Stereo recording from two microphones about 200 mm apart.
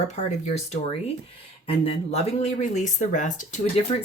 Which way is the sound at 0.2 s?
35° left (ahead or behind).